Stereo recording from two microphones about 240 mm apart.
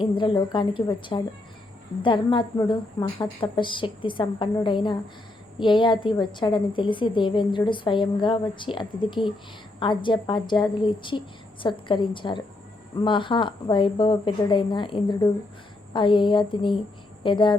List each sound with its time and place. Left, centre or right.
0.0 s a woman's voice: left